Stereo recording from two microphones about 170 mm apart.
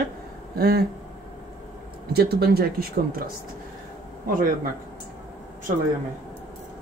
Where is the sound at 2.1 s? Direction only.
70° right (ahead or behind).